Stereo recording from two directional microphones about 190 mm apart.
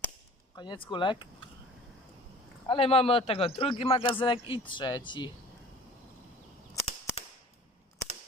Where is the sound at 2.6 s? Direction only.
30° left (ahead or behind).